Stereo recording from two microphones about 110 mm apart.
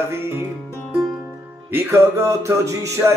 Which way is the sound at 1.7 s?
20° right (ahead or behind).